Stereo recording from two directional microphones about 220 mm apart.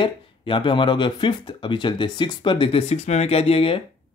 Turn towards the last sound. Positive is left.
turn(degrees=25)  # may be behind; listen again after turning